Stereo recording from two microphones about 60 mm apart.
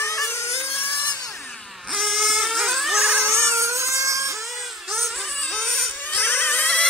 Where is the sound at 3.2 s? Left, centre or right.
Right.